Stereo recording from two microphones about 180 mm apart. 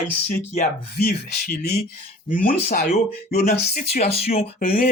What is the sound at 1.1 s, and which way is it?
Speech, 60° left (ahead or behind).